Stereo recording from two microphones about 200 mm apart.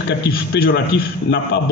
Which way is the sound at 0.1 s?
60° left (ahead or behind).